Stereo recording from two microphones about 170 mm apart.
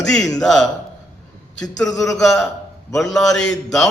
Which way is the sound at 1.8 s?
20° left (ahead or behind).